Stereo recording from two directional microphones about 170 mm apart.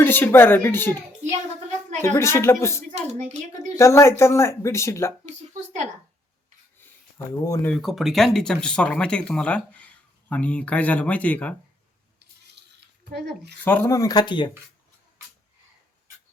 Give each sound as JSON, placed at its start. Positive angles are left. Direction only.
{"t": 0.0, "sound": "speech", "side_deg": 10}
{"t": 2.1, "sound": "speech", "side_deg": 15}
{"t": 2.9, "sound": "speech", "side_deg": -45}
{"t": 3.8, "sound": "speech", "side_deg": 15}
{"t": 5.2, "sound": "speech", "side_deg": -45}
{"t": 7.4, "sound": "speech", "side_deg": 20}
{"t": 7.7, "sound": "speech", "side_deg": 0}
{"t": 12.2, "sound": "a sound", "side_deg": -80}
{"t": 13.7, "sound": "speech", "side_deg": 15}